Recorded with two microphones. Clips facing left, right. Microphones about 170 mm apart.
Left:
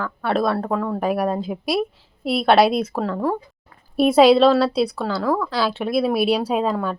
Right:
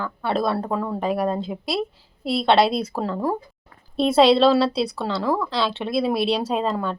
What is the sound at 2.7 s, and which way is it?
Speech, 35° right (ahead or behind).